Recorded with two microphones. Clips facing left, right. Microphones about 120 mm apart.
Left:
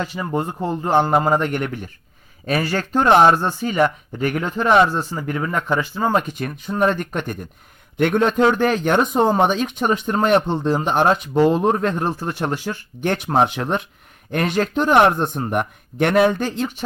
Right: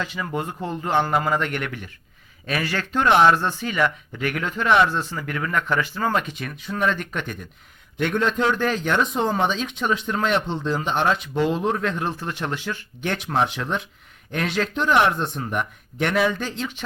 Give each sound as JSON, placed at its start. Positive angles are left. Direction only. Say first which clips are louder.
{"t": 0.0, "sound": "speech", "louder": "left 4 dB", "side_deg": 35}
{"t": 6.1, "sound": "speech", "louder": "left 4 dB", "side_deg": 45}
{"t": 7.9, "sound": "a man's voice", "louder": "left 5 dB", "side_deg": 55}